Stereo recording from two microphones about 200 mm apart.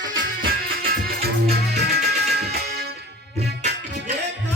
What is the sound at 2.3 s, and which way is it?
Music, 55° right (ahead or behind).